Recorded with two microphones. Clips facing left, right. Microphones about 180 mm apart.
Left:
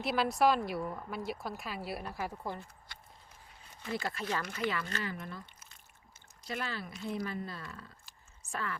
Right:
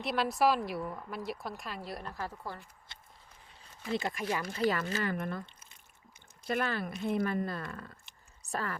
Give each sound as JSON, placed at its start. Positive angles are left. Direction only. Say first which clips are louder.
{"t": 0.0, "sound": "speech", "louder": "even", "side_deg": 0}
{"t": 2.9, "sound": "a sound", "louder": "left 1 dB", "side_deg": -25}
{"t": 3.9, "sound": "speech", "louder": "right 3 dB", "side_deg": -15}
{"t": 4.4, "sound": "speech", "louder": "right 5 dB", "side_deg": -35}
{"t": 5.0, "sound": "speech", "louder": "right 6 dB", "side_deg": -55}
{"t": 6.5, "sound": "speech", "louder": "right 6 dB", "side_deg": -55}
{"t": 8.4, "sound": "a sound", "louder": "right 3 dB", "side_deg": -40}